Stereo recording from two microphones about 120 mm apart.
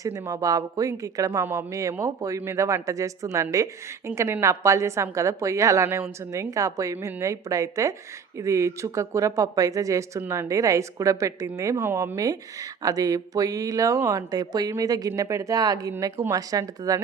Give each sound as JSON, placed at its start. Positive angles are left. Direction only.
{"t": 0.0, "sound": "speech", "side_deg": -30}